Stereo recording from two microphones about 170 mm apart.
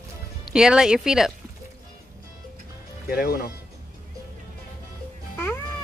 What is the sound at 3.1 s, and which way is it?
Speech, 60° left (ahead or behind).